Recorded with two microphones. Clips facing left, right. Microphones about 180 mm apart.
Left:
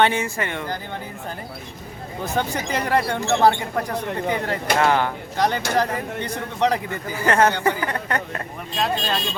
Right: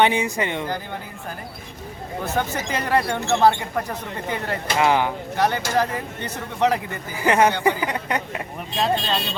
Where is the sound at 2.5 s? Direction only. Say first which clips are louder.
Even; 15° left (ahead or behind).